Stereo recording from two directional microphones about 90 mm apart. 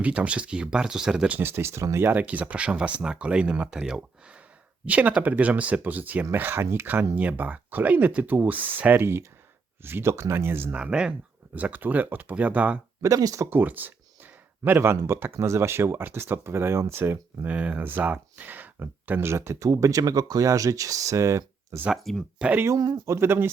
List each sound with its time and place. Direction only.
0.0 s speech: 15° right (ahead or behind)
1.4 s speech: 25° right (ahead or behind)
10.8 s speech: 10° right (ahead or behind)
13.0 s speech: 40° right (ahead or behind)
13.5 s speech: 20° right (ahead or behind)
21.8 s speech: 5° right (ahead or behind)
22.6 s speech: 35° right (ahead or behind)